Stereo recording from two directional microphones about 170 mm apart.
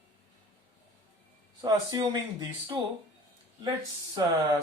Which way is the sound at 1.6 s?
25° right (ahead or behind).